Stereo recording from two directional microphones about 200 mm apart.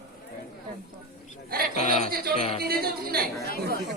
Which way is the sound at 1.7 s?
35° left (ahead or behind).